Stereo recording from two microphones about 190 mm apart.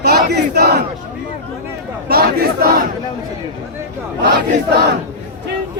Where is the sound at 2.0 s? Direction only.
55° right (ahead or behind).